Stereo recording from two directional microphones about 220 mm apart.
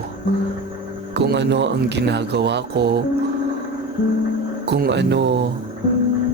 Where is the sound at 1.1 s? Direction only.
50° right (ahead or behind).